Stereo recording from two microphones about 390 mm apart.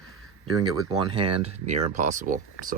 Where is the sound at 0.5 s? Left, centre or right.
Centre.